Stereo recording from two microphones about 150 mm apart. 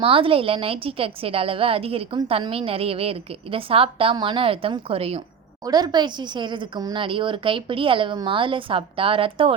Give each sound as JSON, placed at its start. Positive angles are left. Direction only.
{"t": 0.0, "sound": "a woman's voice", "side_deg": -35}
{"t": 5.6, "sound": "a woman's voice", "side_deg": -25}